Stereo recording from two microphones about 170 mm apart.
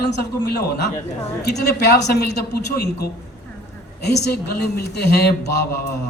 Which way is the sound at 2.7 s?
70° left (ahead or behind).